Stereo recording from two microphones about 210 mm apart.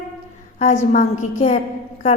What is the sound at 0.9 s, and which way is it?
Speech, 35° left (ahead or behind).